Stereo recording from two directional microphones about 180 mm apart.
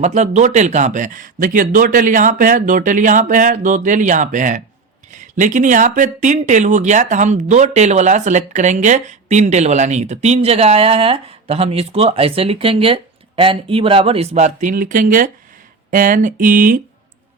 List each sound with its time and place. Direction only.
0.0 s speech: 40° right (ahead or behind)